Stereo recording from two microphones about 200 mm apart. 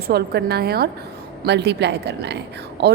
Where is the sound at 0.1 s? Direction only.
55° right (ahead or behind).